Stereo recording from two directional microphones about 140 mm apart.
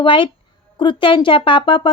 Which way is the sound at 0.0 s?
35° left (ahead or behind).